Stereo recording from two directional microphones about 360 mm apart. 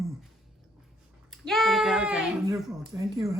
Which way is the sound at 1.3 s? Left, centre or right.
Centre.